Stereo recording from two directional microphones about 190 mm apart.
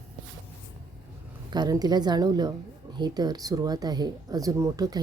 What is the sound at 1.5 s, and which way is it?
Speech, 20° right (ahead or behind).